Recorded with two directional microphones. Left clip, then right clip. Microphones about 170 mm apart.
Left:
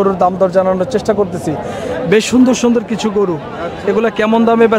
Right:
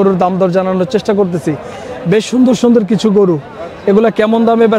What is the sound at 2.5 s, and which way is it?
A man's voice, 25° right (ahead or behind).